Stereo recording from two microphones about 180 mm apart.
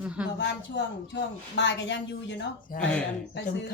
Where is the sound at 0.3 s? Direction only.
75° left (ahead or behind).